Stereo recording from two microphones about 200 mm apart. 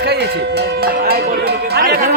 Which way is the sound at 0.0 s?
55° right (ahead or behind).